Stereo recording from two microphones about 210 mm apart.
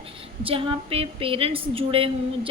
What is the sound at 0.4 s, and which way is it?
A woman's voice, 25° right (ahead or behind).